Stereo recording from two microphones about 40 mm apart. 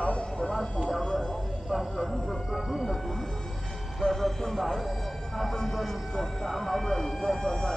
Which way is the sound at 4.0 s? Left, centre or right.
Centre.